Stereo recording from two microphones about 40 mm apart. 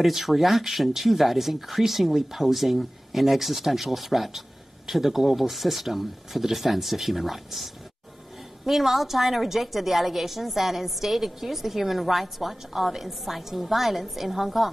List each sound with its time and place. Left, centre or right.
0.0 s a woman's voice: centre